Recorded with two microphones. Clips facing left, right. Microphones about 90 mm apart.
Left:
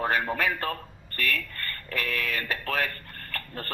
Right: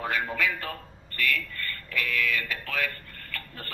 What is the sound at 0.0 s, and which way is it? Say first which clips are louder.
A man's voice: left 3 dB; 40° left (ahead or behind).